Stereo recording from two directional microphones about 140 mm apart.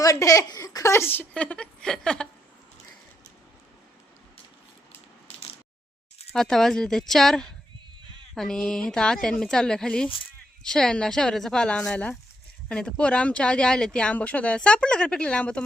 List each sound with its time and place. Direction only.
0.0 s speech: 25° left (ahead or behind); by 2.2 s 5° left (ahead or behind)
6.3 s a woman's voice: 5° left (ahead or behind)